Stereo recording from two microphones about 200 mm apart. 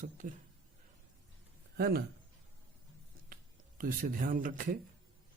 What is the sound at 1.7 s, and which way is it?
Speech, 50° right (ahead or behind).